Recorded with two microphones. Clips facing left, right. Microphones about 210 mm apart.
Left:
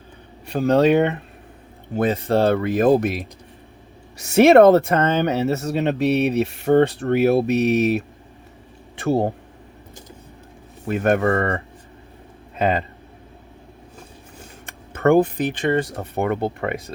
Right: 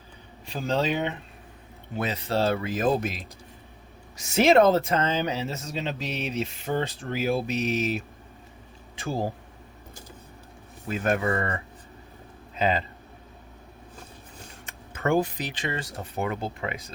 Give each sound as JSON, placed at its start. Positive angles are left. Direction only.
{"t": 0.4, "sound": "speech", "side_deg": 65}
{"t": 10.8, "sound": "speech", "side_deg": 60}
{"t": 14.7, "sound": "speech", "side_deg": 60}